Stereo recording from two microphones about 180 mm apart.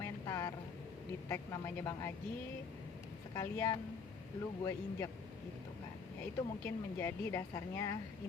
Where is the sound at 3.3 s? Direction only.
15° left (ahead or behind).